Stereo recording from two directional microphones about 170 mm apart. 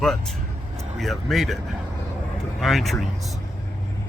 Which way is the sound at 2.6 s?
Centre (ahead or behind).